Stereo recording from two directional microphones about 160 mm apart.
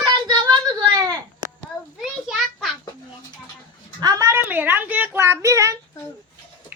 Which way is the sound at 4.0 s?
20° right (ahead or behind).